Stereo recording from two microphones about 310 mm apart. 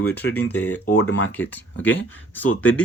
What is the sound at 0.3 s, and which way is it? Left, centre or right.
Speech, left.